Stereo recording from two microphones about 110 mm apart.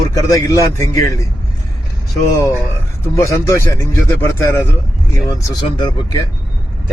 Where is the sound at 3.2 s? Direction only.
30° left (ahead or behind).